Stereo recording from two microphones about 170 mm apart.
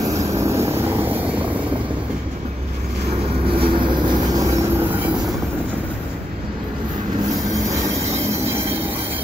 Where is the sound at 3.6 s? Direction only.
25° right (ahead or behind).